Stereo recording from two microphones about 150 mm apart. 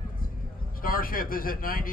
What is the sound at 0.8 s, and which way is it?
A man's voice, 75° left (ahead or behind).